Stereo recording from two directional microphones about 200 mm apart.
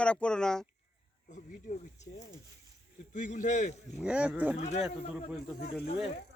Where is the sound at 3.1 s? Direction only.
40° left (ahead or behind).